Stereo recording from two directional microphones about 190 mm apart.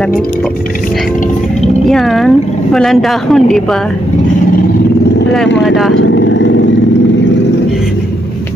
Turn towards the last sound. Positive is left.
turn(degrees=70)  # may be behind; listen again after turning